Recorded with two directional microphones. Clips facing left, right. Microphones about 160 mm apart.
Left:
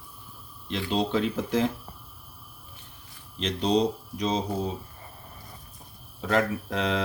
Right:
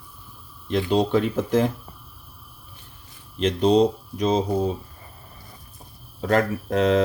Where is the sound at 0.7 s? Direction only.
45° right (ahead or behind).